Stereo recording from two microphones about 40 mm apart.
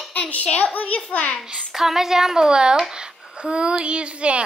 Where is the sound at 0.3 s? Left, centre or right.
Left.